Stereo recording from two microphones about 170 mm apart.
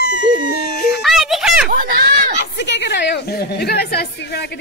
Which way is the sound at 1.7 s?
55° right (ahead or behind).